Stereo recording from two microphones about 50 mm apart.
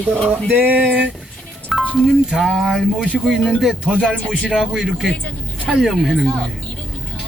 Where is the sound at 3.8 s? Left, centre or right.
Centre.